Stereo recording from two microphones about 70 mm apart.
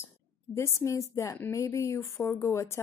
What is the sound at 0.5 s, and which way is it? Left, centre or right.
A woman's voice, left.